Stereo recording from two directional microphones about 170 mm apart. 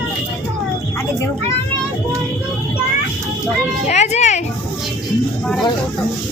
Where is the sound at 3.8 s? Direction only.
40° left (ahead or behind).